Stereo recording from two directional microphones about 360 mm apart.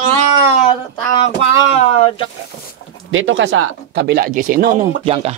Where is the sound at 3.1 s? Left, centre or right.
Right.